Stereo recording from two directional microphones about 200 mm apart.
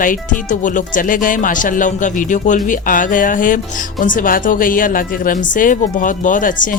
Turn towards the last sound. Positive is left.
turn(degrees=40)  # may be behind; listen again after turning